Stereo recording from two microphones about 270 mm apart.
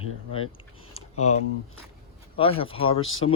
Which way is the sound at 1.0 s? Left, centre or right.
Left.